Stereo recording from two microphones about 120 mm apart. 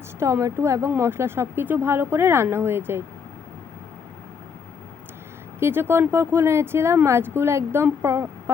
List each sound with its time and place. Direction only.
0.2 s speech: 20° right (ahead or behind)
5.5 s speech: 20° right (ahead or behind)